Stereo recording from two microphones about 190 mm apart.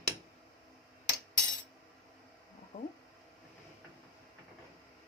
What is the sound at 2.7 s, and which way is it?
Speech, 40° left (ahead or behind).